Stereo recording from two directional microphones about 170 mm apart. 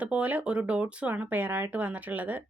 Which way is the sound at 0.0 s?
10° right (ahead or behind).